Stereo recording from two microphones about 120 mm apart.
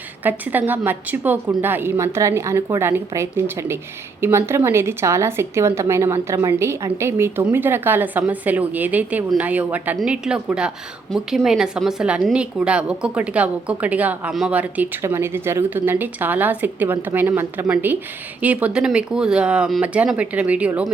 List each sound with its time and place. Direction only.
0.2 s a woman's voice: 15° right (ahead or behind)